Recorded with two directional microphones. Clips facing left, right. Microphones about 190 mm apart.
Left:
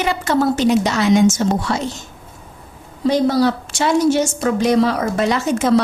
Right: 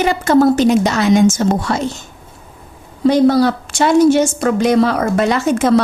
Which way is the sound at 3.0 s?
60° right (ahead or behind).